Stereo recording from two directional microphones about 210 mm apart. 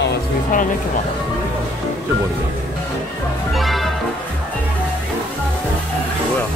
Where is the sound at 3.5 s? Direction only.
Centre (ahead or behind).